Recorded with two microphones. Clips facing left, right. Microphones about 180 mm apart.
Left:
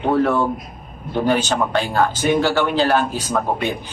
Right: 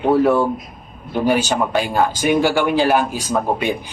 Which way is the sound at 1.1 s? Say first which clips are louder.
Right 1 dB; 10° right (ahead or behind).